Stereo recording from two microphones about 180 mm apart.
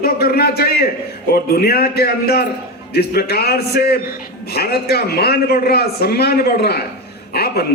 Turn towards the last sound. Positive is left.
turn(degrees=60)  # may be behind; listen again after turning